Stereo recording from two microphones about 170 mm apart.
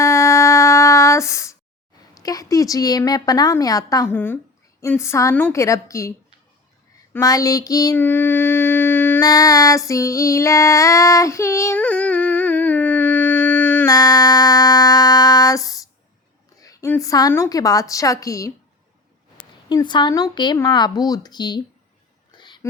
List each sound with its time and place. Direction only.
0.0 s a sound: 20° left (ahead or behind)
2.1 s a woman's voice: 20° left (ahead or behind)
7.1 s female singing: 20° left (ahead or behind)
13.9 s music: 20° left (ahead or behind)
16.6 s a woman's voice: 20° left (ahead or behind)
19.6 s speech: 25° left (ahead or behind)
22.4 s whispering: 25° left (ahead or behind)